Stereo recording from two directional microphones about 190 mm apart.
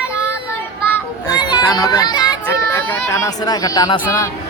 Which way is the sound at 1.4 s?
20° left (ahead or behind).